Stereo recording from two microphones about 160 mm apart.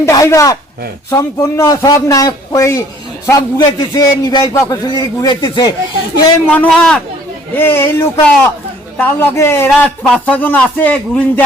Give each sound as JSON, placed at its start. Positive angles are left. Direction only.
{"t": 0.0, "sound": "a man's voice", "side_deg": 20}
{"t": 6.6, "sound": "a man's voice", "side_deg": 5}